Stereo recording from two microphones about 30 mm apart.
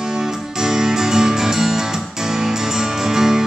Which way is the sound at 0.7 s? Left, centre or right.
Centre.